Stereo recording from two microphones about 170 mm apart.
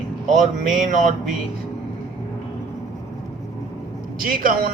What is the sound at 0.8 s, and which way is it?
Speech, 50° right (ahead or behind).